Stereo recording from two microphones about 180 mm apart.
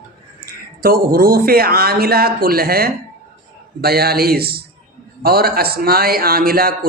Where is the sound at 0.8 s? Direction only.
55° right (ahead or behind).